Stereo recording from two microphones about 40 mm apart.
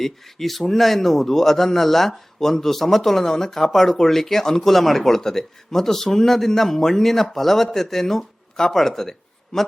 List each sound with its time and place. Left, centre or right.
0.0 s a man's voice: centre